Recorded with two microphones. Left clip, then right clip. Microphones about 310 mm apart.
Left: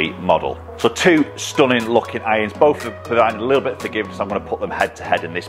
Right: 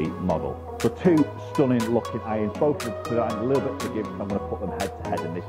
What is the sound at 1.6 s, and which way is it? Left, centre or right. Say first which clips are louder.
Speech: left 8 dB; centre.